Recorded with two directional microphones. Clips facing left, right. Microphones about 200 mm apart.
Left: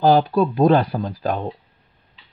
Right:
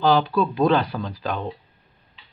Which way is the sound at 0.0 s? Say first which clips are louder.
Left 3 dB; 45° left (ahead or behind).